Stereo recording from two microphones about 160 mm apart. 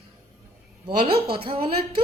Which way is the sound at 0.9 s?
35° right (ahead or behind).